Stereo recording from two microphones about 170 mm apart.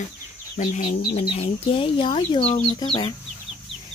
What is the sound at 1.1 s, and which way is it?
Speech, 35° left (ahead or behind).